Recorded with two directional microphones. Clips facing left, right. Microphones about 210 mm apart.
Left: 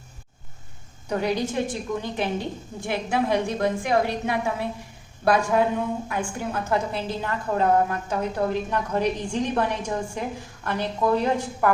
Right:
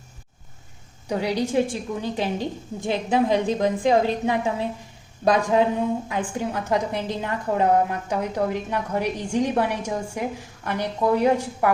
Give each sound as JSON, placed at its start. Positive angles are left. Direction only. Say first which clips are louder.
{"t": 1.0, "sound": "a woman's voice", "louder": "right 1 dB", "side_deg": -15}